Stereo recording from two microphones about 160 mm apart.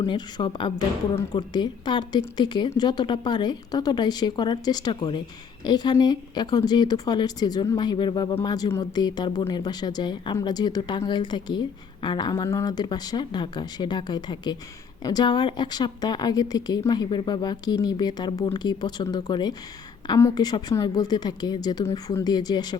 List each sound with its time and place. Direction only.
0.0 s a woman's voice: 30° left (ahead or behind)